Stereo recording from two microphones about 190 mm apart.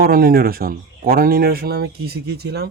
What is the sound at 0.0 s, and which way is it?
A man's voice, 50° right (ahead or behind).